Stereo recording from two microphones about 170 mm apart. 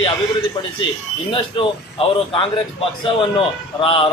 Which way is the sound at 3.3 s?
30° left (ahead or behind).